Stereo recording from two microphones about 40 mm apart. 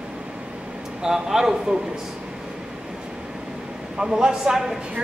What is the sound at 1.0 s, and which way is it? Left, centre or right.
Speech, centre.